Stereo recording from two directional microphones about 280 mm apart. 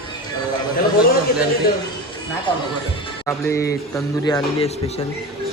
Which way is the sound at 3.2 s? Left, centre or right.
Centre.